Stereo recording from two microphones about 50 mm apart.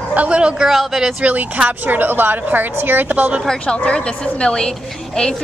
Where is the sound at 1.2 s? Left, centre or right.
Right.